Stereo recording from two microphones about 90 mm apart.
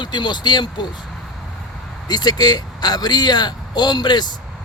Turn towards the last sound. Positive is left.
turn(degrees=50)  # may be behind; listen again after turning